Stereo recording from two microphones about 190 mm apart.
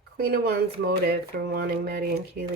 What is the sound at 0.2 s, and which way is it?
Speech, 55° right (ahead or behind).